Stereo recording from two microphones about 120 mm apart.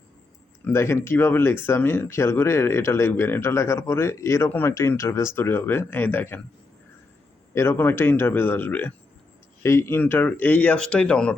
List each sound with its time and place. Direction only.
0.6 s speech: 20° left (ahead or behind)
7.5 s speech: 20° left (ahead or behind)